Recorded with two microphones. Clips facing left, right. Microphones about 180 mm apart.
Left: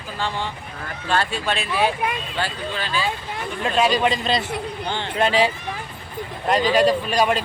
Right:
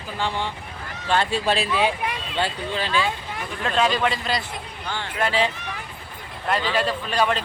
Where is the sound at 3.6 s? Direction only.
10° left (ahead or behind).